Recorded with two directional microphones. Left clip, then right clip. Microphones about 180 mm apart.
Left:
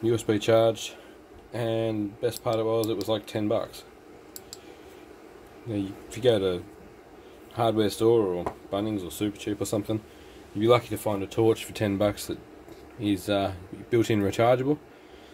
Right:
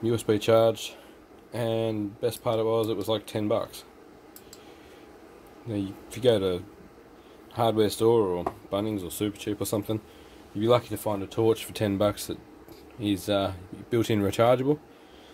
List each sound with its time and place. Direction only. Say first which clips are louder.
0.0 s speech: even; 20° right (ahead or behind)
5.7 s speech: left 1 dB; 20° right (ahead or behind)